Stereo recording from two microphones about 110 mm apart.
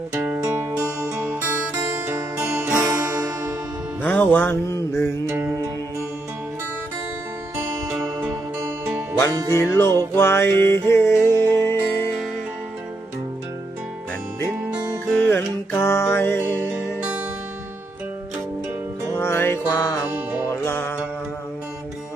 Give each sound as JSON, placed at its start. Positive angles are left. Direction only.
{"t": 0.1, "sound": "music", "side_deg": -15}
{"t": 2.0, "sound": "music", "side_deg": -25}
{"t": 4.0, "sound": "music", "side_deg": 15}
{"t": 5.2, "sound": "music", "side_deg": -25}
{"t": 8.5, "sound": "music", "side_deg": -20}
{"t": 9.3, "sound": "music", "side_deg": -35}
{"t": 9.6, "sound": "music", "side_deg": 25}
{"t": 15.1, "sound": "music", "side_deg": 15}
{"t": 16.7, "sound": "music", "side_deg": -10}
{"t": 19.1, "sound": "music", "side_deg": 20}
{"t": 20.1, "sound": "music", "side_deg": -25}
{"t": 20.6, "sound": "music", "side_deg": 20}